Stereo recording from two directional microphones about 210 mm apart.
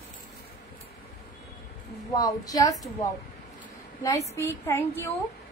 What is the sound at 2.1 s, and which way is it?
Speech, 15° left (ahead or behind).